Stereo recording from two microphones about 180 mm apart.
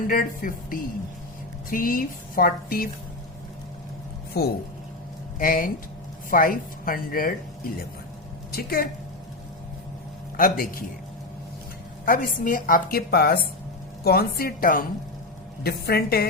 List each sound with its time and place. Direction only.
0.1 s a woman's voice: 50° left (ahead or behind)
4.4 s a woman's voice: 60° left (ahead or behind)
10.3 s a woman's voice: 55° left (ahead or behind)
12.0 s a woman's voice: 50° left (ahead or behind)